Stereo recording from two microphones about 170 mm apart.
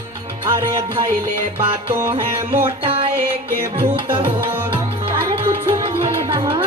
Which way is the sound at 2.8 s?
30° right (ahead or behind).